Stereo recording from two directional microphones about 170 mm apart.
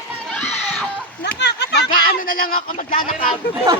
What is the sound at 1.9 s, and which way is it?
Speech, 55° left (ahead or behind).